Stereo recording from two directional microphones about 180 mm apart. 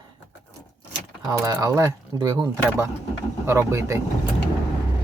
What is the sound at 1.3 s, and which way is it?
Speech, 20° right (ahead or behind).